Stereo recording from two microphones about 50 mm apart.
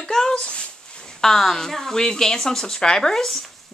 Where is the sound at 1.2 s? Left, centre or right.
Centre.